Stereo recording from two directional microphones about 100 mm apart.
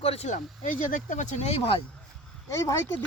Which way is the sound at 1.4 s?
70° left (ahead or behind).